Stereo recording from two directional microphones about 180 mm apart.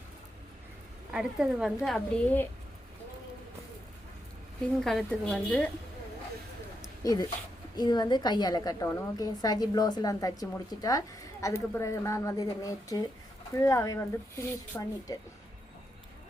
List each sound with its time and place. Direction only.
1.1 s a woman's voice: 5° right (ahead or behind)
4.8 s a woman's voice: centre (ahead or behind)
7.0 s a woman's voice: 20° left (ahead or behind)